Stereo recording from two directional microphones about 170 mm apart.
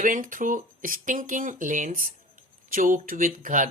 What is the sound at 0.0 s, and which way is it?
Speech, 50° right (ahead or behind).